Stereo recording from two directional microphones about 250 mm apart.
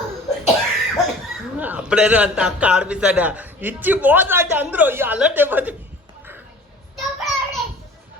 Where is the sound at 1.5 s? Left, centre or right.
Centre.